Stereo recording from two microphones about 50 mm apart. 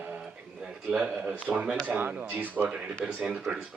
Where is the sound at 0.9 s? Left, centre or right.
Centre.